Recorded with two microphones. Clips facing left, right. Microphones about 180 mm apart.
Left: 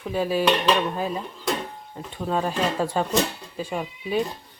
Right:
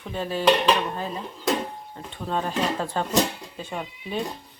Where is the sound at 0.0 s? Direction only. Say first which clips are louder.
Left 5 dB; 5° left (ahead or behind).